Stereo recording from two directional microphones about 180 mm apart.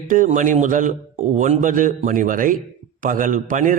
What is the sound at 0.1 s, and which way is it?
A man's voice, 45° right (ahead or behind).